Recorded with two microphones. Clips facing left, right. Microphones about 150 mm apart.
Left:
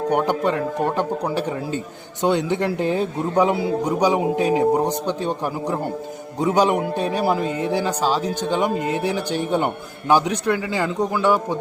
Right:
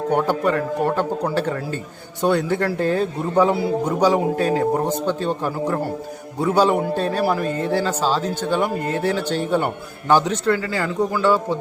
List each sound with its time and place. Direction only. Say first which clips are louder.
0.1 s a man's voice: right 2 dB; 15° left (ahead or behind)